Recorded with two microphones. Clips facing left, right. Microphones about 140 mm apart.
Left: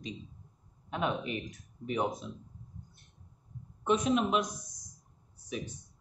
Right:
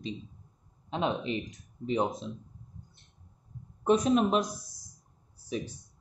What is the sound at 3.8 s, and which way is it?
Speech, 40° right (ahead or behind).